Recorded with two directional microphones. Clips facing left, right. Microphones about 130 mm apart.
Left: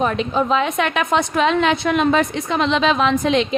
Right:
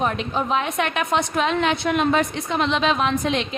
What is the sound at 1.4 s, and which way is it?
A woman's voice, 90° left.